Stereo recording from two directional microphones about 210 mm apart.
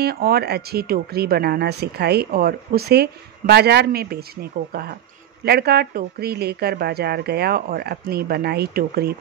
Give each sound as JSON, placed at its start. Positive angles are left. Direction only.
{"t": 0.0, "sound": "speech", "side_deg": -45}